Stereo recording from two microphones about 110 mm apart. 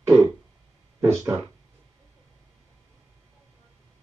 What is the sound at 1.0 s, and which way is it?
Speech, 25° right (ahead or behind).